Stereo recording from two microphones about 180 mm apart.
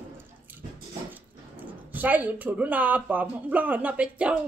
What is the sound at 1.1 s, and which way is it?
Speech, 10° right (ahead or behind).